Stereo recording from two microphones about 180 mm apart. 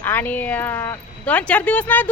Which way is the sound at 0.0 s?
10° left (ahead or behind).